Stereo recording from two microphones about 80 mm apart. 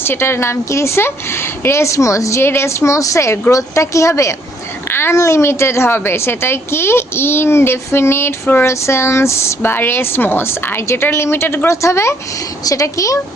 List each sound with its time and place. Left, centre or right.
0.0 s a woman's voice: left